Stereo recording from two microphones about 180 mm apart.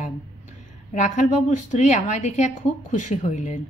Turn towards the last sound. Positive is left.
turn(degrees=40)  # may be behind; listen again after turning